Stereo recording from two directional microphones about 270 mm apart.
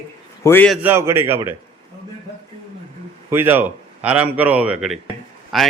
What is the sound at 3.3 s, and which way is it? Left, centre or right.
A man's voice, centre.